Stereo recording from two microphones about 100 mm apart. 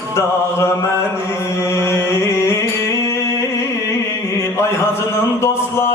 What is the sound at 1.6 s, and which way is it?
Music, 30° left (ahead or behind).